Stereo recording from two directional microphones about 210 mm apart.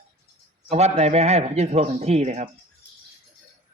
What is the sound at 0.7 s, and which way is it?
Speech, 30° right (ahead or behind).